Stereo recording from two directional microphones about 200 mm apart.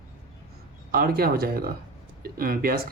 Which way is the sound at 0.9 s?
50° right (ahead or behind).